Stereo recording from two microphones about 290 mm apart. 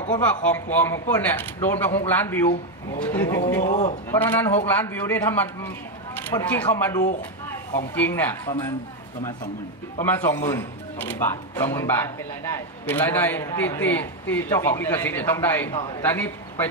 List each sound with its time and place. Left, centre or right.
0.2 s speech: centre
3.6 s speech: left
4.1 s speech: centre
10.0 s a man's voice: centre